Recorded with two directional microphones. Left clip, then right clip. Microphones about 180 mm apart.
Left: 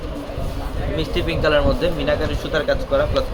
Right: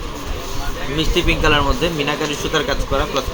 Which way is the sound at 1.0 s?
45° right (ahead or behind).